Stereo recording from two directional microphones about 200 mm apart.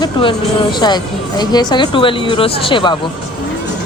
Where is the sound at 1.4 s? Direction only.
20° left (ahead or behind).